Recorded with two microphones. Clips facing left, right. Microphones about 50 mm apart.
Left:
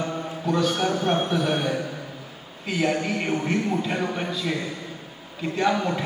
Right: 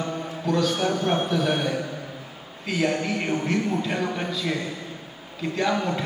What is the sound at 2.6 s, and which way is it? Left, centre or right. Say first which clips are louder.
A man's voice: even; centre.